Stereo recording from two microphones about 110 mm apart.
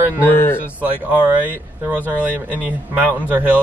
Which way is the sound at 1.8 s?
15° right (ahead or behind).